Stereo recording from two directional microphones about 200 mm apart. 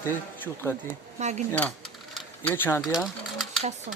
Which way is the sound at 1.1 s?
35° right (ahead or behind).